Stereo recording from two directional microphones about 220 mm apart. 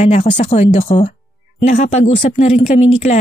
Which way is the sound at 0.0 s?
30° left (ahead or behind).